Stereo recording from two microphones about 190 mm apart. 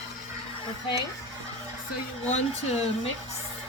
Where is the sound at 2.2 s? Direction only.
35° left (ahead or behind).